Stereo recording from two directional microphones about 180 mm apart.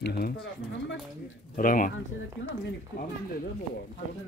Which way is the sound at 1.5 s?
50° left (ahead or behind).